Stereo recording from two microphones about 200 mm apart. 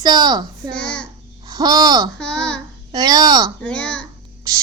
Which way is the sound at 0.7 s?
5° left (ahead or behind).